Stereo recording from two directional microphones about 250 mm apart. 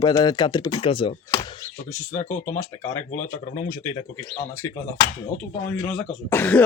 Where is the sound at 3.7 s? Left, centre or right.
Centre.